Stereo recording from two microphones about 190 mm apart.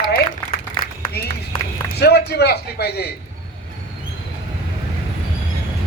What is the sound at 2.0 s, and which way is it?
A man's voice, 60° left (ahead or behind).